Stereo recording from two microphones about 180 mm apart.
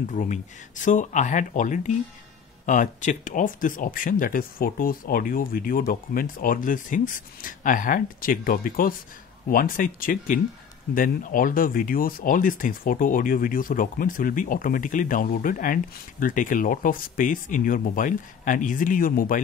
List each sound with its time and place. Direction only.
0.1 s speech: 45° left (ahead or behind)